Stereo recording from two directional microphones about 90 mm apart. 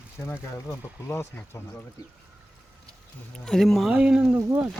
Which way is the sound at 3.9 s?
10° right (ahead or behind).